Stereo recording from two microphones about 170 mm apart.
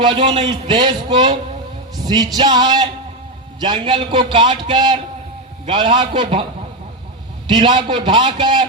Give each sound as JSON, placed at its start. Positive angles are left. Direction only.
{"t": 0.0, "sound": "a man's voice", "side_deg": -30}
{"t": 7.4, "sound": "a man's voice", "side_deg": -30}